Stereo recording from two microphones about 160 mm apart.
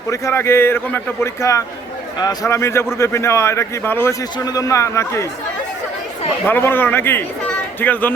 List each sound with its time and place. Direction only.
0.1 s a man's voice: 15° left (ahead or behind)
6.4 s a man's voice: 15° left (ahead or behind)